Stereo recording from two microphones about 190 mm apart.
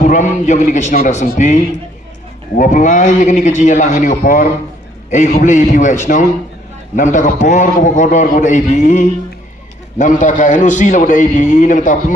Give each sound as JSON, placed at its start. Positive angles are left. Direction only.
{"t": 0.0, "sound": "a sound", "side_deg": 40}
{"t": 0.4, "sound": "a man's voice", "side_deg": 40}
{"t": 2.6, "sound": "a man's voice", "side_deg": 40}